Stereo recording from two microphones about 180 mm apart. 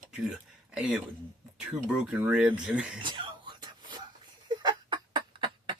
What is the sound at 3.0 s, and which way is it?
Whispering, 25° right (ahead or behind).